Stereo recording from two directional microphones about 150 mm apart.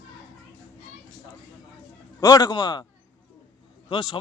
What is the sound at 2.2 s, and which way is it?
Speech, 25° left (ahead or behind).